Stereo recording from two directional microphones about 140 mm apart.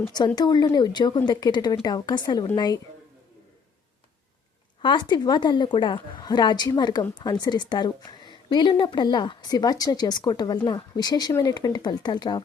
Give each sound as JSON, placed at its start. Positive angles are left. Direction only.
{"t": 0.3, "sound": "a woman's voice", "side_deg": 30}
{"t": 4.8, "sound": "a woman's voice", "side_deg": 35}